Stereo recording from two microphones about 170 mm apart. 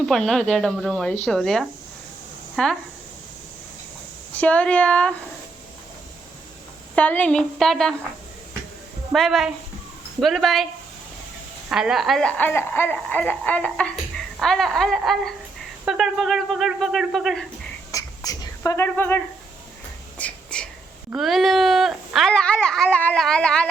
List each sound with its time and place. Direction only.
0.0 s speech: 5° left (ahead or behind)
4.4 s speech: 5° left (ahead or behind)
6.9 s speech: 10° left (ahead or behind)
9.1 s speech: centre (ahead or behind)
11.7 s speech: 5° right (ahead or behind)
17.9 s a sound: 20° left (ahead or behind)
21.2 s speech: centre (ahead or behind)